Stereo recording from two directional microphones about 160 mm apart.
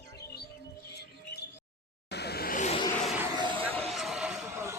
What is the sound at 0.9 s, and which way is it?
Bird, 90° left.